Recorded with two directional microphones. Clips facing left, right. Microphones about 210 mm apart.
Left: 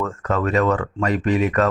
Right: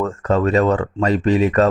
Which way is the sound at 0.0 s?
30° right (ahead or behind).